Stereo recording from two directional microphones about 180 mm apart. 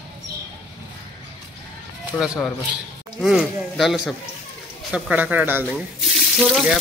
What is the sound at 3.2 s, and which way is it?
Frying, centre (ahead or behind).